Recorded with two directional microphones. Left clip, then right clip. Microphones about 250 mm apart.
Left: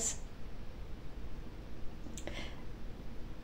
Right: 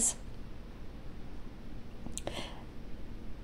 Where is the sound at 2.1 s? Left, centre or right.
Right.